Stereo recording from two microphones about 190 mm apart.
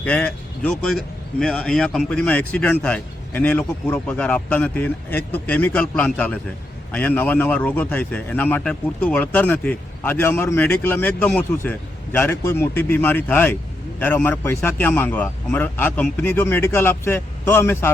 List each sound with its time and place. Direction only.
0.0 s a man's voice: 5° left (ahead or behind)